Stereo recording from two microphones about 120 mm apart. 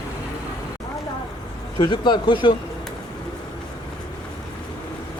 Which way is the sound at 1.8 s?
40° left (ahead or behind).